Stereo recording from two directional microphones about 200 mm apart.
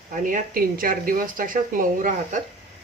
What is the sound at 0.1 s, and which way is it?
Speech, 40° right (ahead or behind).